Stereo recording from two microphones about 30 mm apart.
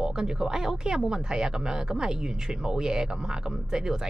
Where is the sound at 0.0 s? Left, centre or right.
Right.